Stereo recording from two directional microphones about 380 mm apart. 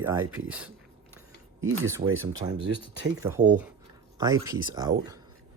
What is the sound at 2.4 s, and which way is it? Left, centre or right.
Speech, centre.